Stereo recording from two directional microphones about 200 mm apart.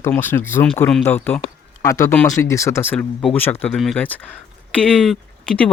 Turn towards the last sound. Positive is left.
turn(degrees=5)  # may be behind; listen again after turning